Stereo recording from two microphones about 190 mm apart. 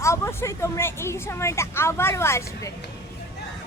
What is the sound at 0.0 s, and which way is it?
A woman's voice, 15° left (ahead or behind).